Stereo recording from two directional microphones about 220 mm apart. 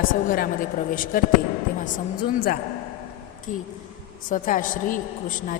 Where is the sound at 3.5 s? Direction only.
35° left (ahead or behind).